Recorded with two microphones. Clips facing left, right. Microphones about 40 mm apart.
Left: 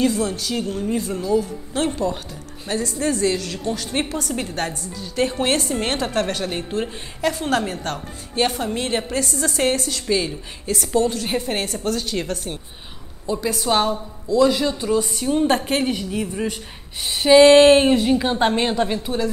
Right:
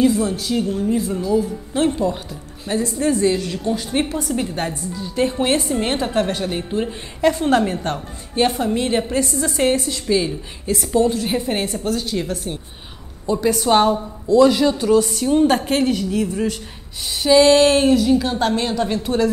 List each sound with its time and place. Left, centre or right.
0.0 s a woman's voice: centre
3.9 s a woman's voice: centre
7.7 s a woman's voice: right
8.4 s a woman's voice: centre
9.2 s a woman's voice: right
10.0 s speech: centre
11.0 s a woman's voice: centre
13.9 s speech: centre
14.4 s speech: centre
14.8 s a woman's voice: centre
15.9 s speech: centre
18.9 s speech: centre